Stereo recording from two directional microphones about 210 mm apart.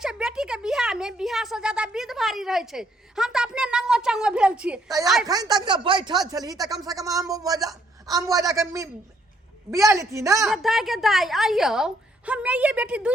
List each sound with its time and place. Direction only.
0.0 s a sound: 5° right (ahead or behind)
5.2 s a man's voice: 20° right (ahead or behind)
10.5 s a woman's voice: centre (ahead or behind)